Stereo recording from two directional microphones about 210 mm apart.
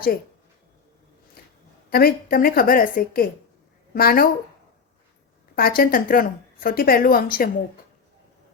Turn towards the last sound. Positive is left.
turn(degrees=45)  # may be behind; listen again after turning